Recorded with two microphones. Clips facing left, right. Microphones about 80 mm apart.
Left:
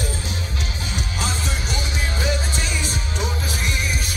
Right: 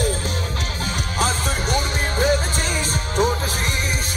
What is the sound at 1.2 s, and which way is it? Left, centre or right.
Music, right.